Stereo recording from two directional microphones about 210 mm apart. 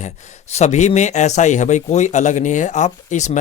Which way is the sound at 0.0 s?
35° left (ahead or behind).